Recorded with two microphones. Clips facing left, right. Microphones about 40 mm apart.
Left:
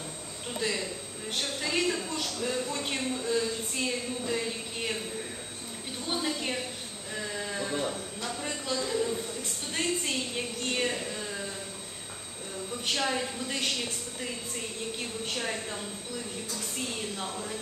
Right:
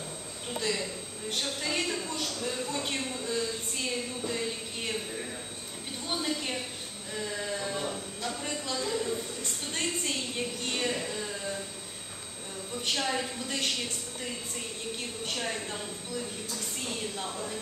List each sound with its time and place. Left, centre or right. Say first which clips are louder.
0.6 s a man's voice: even; centre
6.1 s a woman's voice: left 1 dB; centre
7.2 s sheep: even; centre
8.3 s a woman's voice: left 1 dB; centre
11.1 s a sound: right 1 dB; centre
12.8 s speech: left 1 dB; centre
15.3 s speech: even; centre
17.2 s speech: even; centre